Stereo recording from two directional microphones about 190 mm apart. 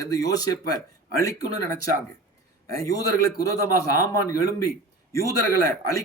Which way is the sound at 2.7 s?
20° left (ahead or behind).